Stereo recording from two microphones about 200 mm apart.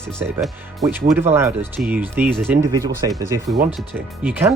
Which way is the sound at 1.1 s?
10° right (ahead or behind).